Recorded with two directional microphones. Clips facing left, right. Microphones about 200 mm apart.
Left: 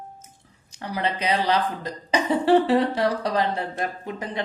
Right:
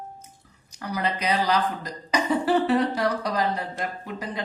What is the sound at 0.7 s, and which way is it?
A man's voice, 30° left (ahead or behind).